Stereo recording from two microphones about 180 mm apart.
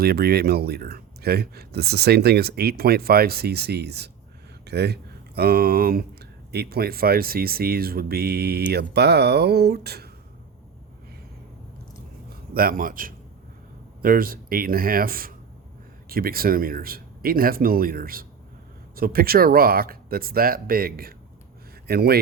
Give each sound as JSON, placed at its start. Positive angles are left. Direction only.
{"t": 0.0, "sound": "speech", "side_deg": -60}
{"t": 12.3, "sound": "a man's voice", "side_deg": -55}